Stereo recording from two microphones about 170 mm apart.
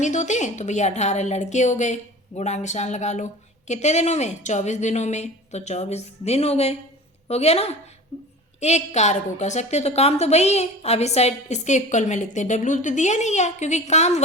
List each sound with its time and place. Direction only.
0.0 s a woman's voice: 45° left (ahead or behind)